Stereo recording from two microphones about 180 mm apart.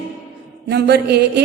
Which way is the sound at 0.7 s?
65° right (ahead or behind).